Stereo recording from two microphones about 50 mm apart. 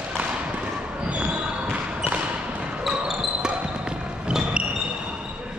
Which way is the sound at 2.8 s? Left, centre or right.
Centre.